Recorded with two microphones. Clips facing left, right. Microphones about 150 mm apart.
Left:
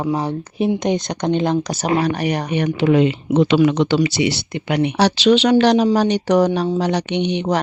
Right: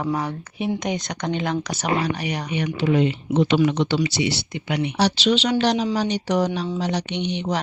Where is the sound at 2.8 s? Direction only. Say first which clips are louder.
Left 5 dB; 90° left.